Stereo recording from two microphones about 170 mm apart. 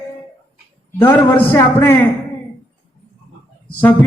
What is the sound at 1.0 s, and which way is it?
Speech, 10° left (ahead or behind).